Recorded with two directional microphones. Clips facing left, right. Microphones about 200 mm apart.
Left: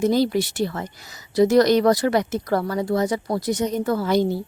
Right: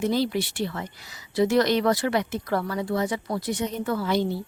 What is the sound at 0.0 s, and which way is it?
Speech, 40° left (ahead or behind).